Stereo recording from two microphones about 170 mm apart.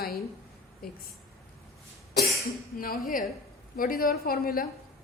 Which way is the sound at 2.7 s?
55° left (ahead or behind).